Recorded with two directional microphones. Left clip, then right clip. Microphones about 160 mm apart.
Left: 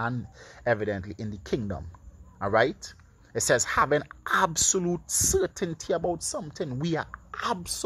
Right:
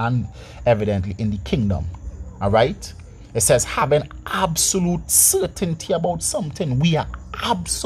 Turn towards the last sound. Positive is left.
turn(degrees=35)  # may be behind; listen again after turning